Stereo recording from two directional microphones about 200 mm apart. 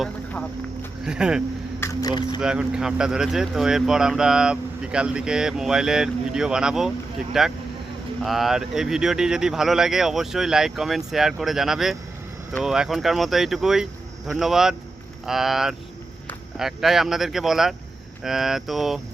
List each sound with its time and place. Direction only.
0.0 s speech: 5° left (ahead or behind)
1.0 s speech: 5° right (ahead or behind)
1.8 s speech: 15° left (ahead or behind)
2.4 s speech: 5° right (ahead or behind)